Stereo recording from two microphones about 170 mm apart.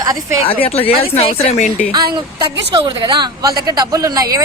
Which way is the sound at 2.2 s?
30° right (ahead or behind).